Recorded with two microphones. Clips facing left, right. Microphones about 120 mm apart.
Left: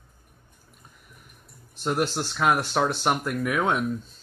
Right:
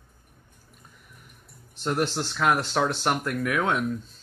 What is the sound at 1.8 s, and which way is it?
Speech, 10° left (ahead or behind).